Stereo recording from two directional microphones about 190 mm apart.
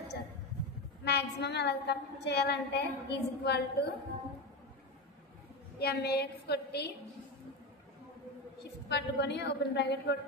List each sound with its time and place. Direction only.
1.0 s a woman's voice: 60° left (ahead or behind)
5.8 s a woman's voice: 55° left (ahead or behind)
8.8 s a woman's voice: 60° left (ahead or behind)